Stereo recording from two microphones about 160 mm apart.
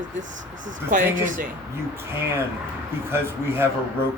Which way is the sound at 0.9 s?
55° right (ahead or behind).